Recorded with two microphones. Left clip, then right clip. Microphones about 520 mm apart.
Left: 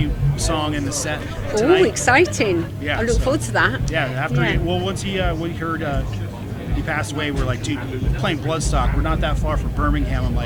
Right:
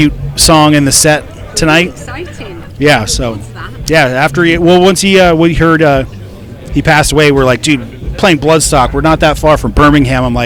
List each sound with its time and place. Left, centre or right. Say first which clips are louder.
0.0 s speech: right 16 dB; right
2.0 s speech: left 9 dB; left
2.8 s speech: right 13 dB; right